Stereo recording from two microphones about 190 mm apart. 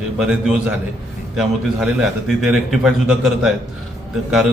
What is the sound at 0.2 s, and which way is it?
Speech, 5° right (ahead or behind).